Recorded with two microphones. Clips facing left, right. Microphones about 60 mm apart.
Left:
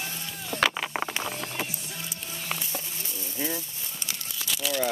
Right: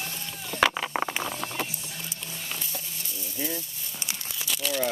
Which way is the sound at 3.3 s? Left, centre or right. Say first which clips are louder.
Left 1 dB; left.